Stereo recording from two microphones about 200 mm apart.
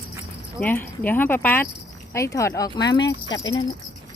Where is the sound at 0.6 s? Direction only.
10° left (ahead or behind).